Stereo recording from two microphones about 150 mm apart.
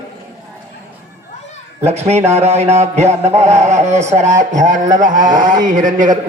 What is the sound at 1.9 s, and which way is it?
Mantra, 45° right (ahead or behind).